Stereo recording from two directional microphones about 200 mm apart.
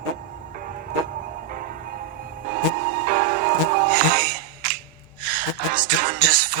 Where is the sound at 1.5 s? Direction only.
45° right (ahead or behind).